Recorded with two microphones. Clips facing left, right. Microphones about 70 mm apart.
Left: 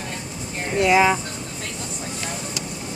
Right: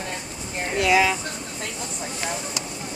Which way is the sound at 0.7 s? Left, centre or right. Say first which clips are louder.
Left 3 dB; left.